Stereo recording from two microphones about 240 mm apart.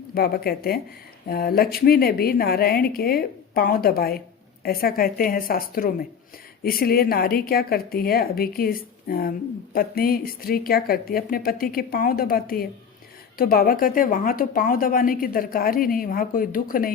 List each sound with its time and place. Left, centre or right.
0.1 s a woman's voice: left